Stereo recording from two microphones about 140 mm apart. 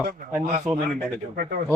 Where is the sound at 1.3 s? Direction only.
80° right.